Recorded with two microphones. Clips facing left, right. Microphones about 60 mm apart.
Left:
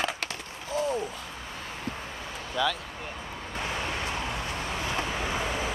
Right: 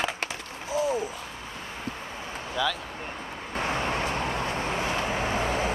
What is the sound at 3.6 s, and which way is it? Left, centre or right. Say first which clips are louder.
Vehicle: right 4 dB; right.